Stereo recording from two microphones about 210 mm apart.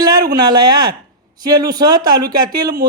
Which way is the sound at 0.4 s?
20° right (ahead or behind).